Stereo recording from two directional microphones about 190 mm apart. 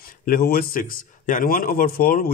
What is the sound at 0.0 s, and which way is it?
A man's voice, 50° left (ahead or behind).